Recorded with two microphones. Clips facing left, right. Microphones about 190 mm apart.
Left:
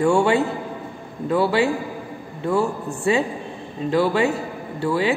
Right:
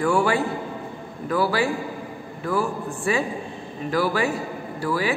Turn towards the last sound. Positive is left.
turn(degrees=25)  # may be behind; listen again after turning